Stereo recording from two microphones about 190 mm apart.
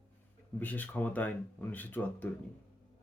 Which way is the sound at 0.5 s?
10° left (ahead or behind).